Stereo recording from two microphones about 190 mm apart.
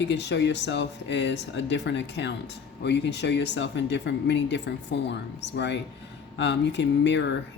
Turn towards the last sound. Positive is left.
turn(degrees=70)  # may be behind; listen again after turning